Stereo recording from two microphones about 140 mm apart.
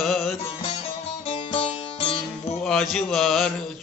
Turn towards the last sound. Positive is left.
turn(degrees=0)  # may be behind; listen again after turning